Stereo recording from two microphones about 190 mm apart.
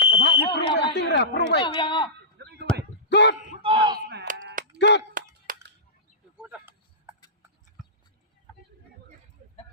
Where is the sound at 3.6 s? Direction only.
25° right (ahead or behind).